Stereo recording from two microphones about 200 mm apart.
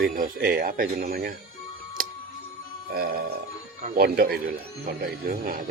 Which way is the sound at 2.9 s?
45° right (ahead or behind).